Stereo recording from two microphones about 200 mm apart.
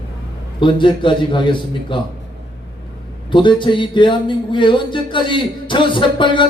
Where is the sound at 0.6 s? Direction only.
25° left (ahead or behind).